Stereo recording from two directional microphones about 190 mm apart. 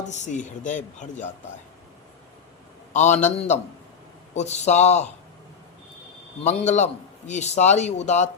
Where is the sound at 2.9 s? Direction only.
40° left (ahead or behind).